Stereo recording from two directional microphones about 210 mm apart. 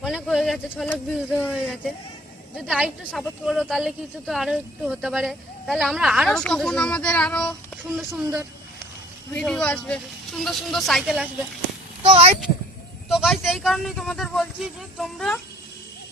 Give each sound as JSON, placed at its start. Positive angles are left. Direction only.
{"t": 0.0, "sound": "speech", "side_deg": 0}
{"t": 2.6, "sound": "speech", "side_deg": -5}
{"t": 9.3, "sound": "speech", "side_deg": 5}
{"t": 12.0, "sound": "speech", "side_deg": -30}
{"t": 13.1, "sound": "speech", "side_deg": 0}